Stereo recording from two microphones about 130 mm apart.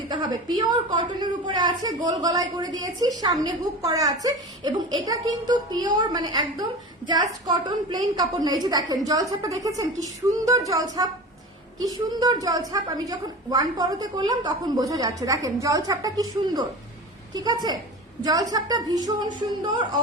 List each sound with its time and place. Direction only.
0.1 s a woman's voice: 35° right (ahead or behind)